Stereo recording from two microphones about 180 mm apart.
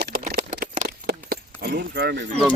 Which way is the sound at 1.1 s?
60° right (ahead or behind).